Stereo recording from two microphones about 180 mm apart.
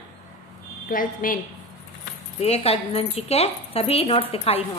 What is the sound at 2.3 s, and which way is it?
A woman's voice, 35° left (ahead or behind).